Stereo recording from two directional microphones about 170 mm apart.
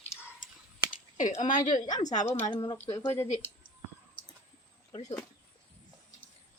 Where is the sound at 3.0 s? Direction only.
15° left (ahead or behind).